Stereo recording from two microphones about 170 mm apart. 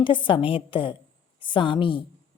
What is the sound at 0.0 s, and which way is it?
A woman's voice, 30° left (ahead or behind).